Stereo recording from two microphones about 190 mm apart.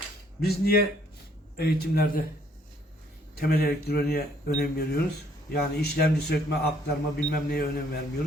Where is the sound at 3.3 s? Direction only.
55° left (ahead or behind).